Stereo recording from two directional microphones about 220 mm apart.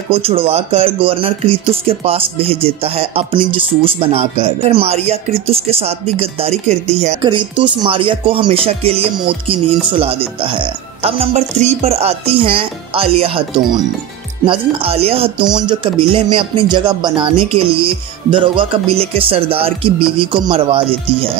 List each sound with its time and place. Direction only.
0.1 s speech: 25° right (ahead or behind)
14.4 s speech: 25° right (ahead or behind)